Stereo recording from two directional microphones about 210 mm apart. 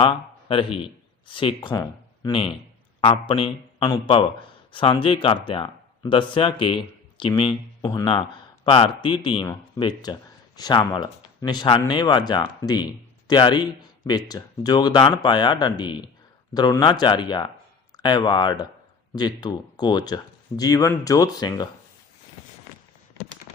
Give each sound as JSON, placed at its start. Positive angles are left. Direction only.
{"t": 0.0, "sound": "a man's voice", "side_deg": 25}